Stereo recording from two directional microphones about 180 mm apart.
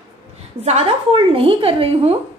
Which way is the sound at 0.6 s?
35° right (ahead or behind).